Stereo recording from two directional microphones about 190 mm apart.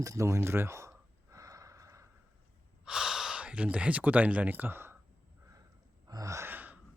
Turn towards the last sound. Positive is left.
turn(degrees=-10)  # may be behind; listen again after turning